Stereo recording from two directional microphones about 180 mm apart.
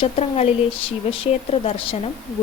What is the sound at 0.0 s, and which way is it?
A woman's voice, 35° left (ahead or behind).